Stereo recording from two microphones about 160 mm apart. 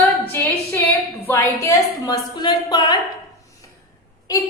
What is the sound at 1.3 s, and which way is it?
A woman's voice, 20° left (ahead or behind).